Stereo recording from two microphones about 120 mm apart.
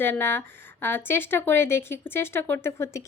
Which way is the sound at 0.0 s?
20° left (ahead or behind).